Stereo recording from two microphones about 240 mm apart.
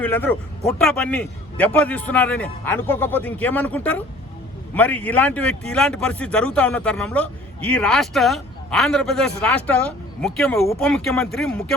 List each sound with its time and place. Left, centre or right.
0.0 s a man's voice: centre